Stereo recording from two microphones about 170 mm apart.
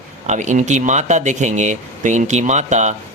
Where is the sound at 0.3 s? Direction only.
45° right (ahead or behind).